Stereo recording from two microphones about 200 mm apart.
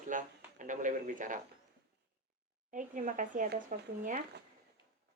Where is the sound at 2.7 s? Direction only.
40° right (ahead or behind).